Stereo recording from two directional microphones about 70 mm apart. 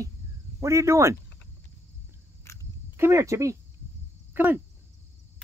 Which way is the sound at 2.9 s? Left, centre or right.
Right.